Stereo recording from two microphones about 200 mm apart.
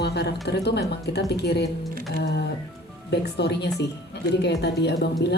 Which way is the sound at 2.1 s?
55° left (ahead or behind).